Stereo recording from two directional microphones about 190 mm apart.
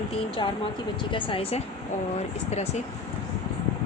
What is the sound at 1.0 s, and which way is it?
Speech, 25° left (ahead or behind).